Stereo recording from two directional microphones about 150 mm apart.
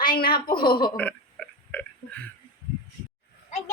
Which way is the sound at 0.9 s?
10° left (ahead or behind).